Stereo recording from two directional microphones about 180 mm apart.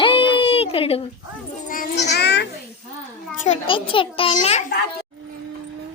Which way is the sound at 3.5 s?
30° left (ahead or behind).